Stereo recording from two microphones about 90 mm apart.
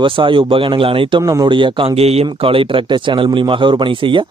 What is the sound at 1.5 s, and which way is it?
A man's voice, 65° right (ahead or behind).